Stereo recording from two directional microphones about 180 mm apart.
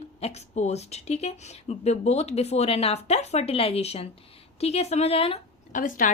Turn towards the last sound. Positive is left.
turn(degrees=45)  # may be behind; listen again after turning